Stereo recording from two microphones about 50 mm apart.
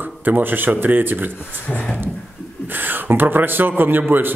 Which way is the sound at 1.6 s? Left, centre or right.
Left.